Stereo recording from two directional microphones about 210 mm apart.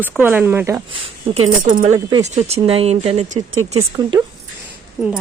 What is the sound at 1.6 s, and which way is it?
Speech, 40° right (ahead or behind).